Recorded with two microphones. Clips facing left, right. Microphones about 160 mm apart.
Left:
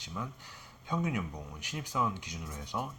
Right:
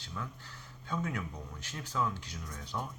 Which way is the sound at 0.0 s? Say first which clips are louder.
Left 2 dB; 15° left (ahead or behind).